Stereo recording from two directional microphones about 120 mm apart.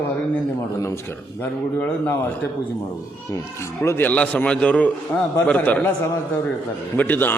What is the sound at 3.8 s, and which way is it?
A man's voice, 15° left (ahead or behind).